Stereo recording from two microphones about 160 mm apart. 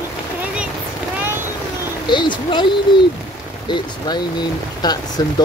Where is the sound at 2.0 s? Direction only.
30° left (ahead or behind).